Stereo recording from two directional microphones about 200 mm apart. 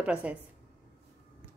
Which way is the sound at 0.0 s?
5° right (ahead or behind).